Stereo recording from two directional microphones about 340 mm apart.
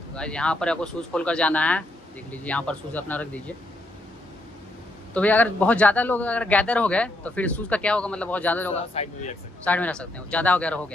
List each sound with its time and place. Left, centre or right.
0.1 s a man's voice: centre
5.1 s a man's voice: centre
8.9 s speech: centre
9.7 s a man's voice: centre